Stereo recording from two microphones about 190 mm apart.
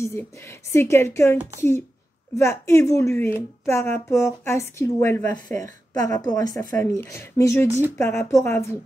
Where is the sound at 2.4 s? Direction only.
15° left (ahead or behind).